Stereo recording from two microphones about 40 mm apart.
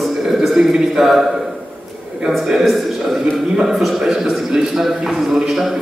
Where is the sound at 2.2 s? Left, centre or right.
Right.